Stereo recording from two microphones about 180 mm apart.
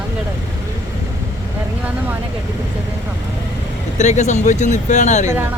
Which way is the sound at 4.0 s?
40° left (ahead or behind).